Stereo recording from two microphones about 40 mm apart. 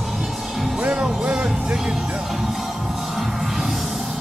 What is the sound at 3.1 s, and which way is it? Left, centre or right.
Music, centre.